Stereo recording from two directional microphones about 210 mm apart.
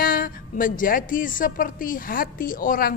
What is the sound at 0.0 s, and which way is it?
A woman's voice, 40° left (ahead or behind).